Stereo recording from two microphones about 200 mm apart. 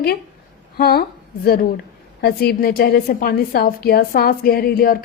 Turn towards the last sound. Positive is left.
turn(degrees=45)  # may be behind; listen again after turning